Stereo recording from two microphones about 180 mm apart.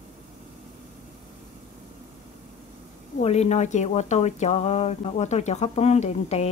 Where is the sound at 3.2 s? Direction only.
35° left (ahead or behind).